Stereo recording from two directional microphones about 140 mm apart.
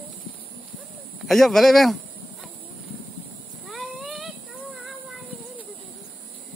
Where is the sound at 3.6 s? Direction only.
Centre (ahead or behind).